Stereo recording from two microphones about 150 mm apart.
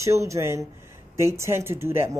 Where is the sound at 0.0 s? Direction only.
20° right (ahead or behind).